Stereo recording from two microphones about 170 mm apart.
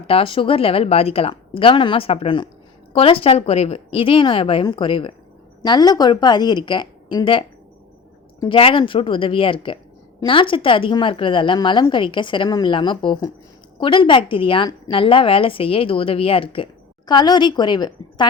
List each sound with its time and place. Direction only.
0.1 s a woman's voice: 35° left (ahead or behind)